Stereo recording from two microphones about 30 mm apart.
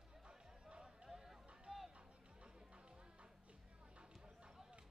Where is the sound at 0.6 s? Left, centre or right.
Right.